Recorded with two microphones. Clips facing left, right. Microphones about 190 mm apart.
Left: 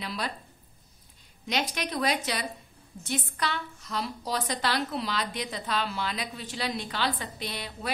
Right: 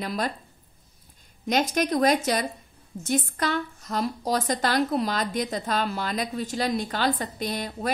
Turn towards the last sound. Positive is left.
turn(degrees=-45)  # may be behind; listen again after turning